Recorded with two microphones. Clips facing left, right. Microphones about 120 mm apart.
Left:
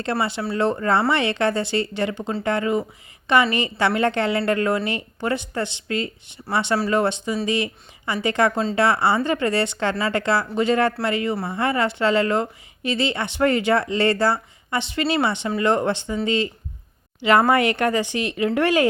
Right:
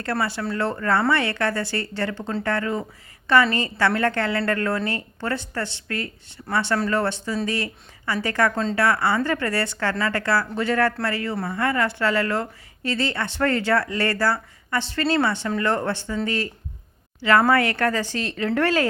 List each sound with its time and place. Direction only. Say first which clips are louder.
0.0 s speech: left 2 dB; 20° left (ahead or behind)